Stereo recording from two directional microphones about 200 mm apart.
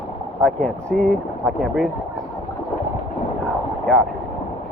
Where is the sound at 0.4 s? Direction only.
5° left (ahead or behind).